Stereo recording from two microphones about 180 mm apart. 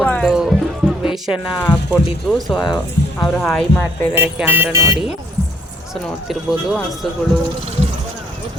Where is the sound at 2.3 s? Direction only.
Centre (ahead or behind).